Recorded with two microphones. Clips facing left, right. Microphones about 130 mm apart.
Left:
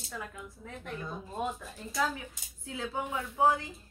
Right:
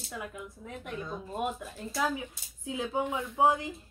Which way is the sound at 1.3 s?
15° right (ahead or behind).